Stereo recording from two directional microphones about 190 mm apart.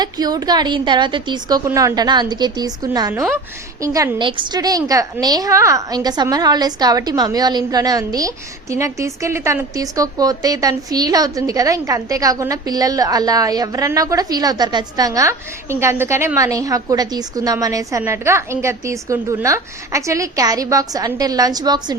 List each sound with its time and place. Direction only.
0.0 s a woman's voice: 20° right (ahead or behind)